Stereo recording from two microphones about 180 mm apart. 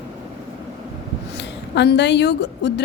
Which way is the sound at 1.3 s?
75° left (ahead or behind).